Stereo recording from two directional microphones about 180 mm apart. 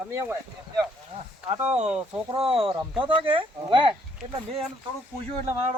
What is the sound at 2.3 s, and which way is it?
Speech, 30° right (ahead or behind).